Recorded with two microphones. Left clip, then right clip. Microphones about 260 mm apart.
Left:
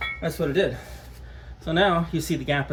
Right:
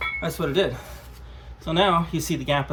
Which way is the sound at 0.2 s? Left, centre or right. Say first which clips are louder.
Even; right.